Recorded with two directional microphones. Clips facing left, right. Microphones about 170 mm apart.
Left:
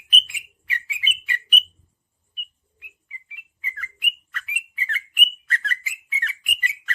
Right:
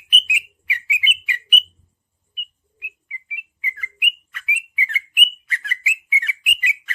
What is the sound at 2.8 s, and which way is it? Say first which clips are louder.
Bird: right 6 dB; 10° right (ahead or behind).